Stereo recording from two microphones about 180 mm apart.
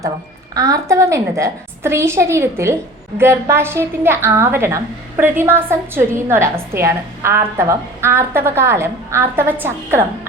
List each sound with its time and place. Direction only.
0.5 s a woman's voice: 20° right (ahead or behind)